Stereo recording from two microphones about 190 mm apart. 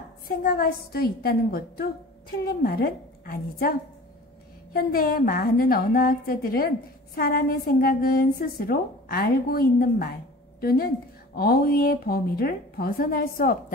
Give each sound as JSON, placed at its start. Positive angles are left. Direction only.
{"t": 0.4, "sound": "a woman's voice", "side_deg": 50}
{"t": 4.7, "sound": "a woman's voice", "side_deg": 50}